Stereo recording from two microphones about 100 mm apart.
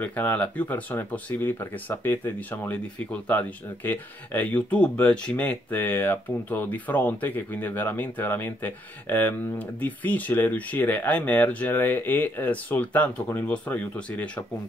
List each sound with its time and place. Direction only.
0.0 s speech: 15° left (ahead or behind)